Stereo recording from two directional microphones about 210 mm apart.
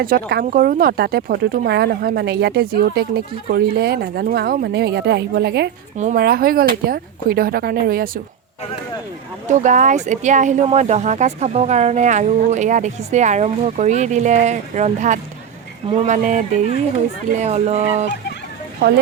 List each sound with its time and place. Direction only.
0.0 s speech: 45° right (ahead or behind)
6.0 s speech: 40° right (ahead or behind)
9.5 s speech: 35° right (ahead or behind)
18.8 s speech: 45° right (ahead or behind)